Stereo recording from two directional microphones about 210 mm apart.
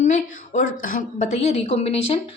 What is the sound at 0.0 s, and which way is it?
A woman's voice, 35° left (ahead or behind).